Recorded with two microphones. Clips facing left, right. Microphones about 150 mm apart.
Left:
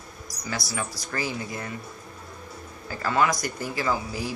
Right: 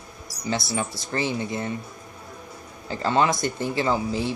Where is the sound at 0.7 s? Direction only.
25° right (ahead or behind).